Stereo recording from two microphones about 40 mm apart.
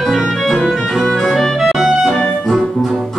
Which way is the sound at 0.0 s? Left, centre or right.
Centre.